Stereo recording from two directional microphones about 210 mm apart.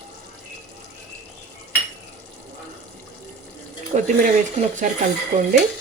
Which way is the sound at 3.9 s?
35° right (ahead or behind).